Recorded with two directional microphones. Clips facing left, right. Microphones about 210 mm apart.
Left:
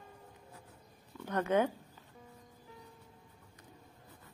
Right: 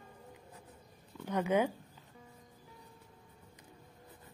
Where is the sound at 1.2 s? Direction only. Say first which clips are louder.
Even; 10° right (ahead or behind).